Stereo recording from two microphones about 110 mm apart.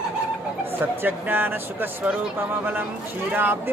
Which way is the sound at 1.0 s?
15° right (ahead or behind).